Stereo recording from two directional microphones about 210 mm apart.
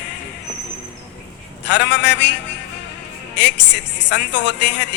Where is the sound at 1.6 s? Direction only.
55° left (ahead or behind).